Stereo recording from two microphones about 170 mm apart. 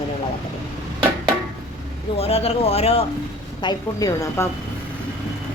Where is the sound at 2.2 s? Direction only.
35° left (ahead or behind).